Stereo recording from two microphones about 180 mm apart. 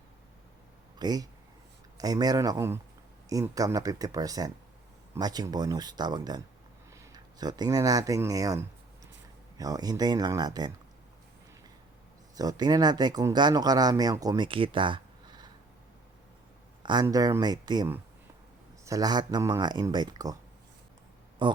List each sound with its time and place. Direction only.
0.9 s speech: 20° right (ahead or behind)
12.4 s speech: 20° right (ahead or behind)
16.8 s speech: 25° right (ahead or behind)
21.4 s speech: 25° right (ahead or behind)